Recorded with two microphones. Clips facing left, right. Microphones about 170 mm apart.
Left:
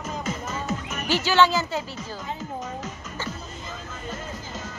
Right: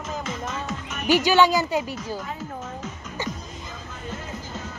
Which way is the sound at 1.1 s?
15° right (ahead or behind).